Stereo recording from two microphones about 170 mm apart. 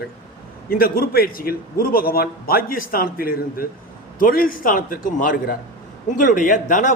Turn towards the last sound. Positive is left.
turn(degrees=50)  # may be behind; listen again after turning